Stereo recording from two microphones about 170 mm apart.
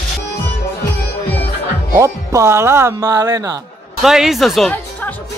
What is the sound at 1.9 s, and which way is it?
Speech, 15° right (ahead or behind).